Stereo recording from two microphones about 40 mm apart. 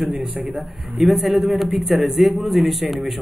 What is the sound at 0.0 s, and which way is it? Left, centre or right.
Speech, centre.